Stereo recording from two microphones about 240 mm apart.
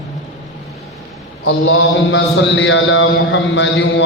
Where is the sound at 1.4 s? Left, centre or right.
Left.